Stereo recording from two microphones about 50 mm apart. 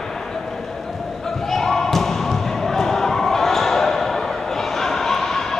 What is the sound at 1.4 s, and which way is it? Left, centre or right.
Basketball bounce, centre.